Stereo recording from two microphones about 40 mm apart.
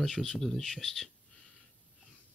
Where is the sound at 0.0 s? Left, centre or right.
Centre.